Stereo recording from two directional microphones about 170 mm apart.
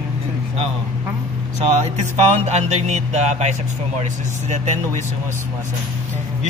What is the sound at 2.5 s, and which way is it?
Music, 40° right (ahead or behind).